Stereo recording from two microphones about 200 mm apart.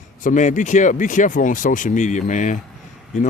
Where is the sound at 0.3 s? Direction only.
40° left (ahead or behind).